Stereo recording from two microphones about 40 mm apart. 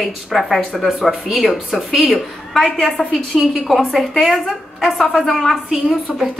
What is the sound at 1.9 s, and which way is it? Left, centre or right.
Speech, right.